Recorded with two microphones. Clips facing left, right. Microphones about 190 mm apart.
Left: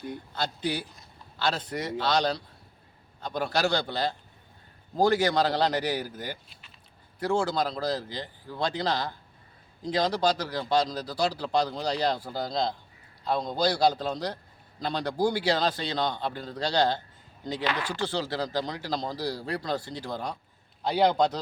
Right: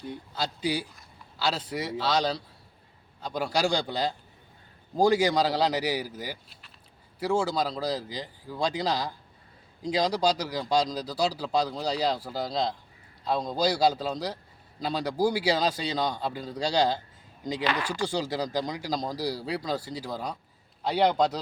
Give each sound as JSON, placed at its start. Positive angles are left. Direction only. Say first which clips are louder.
{"t": 0.3, "sound": "a man's voice", "louder": "right 1 dB", "side_deg": -10}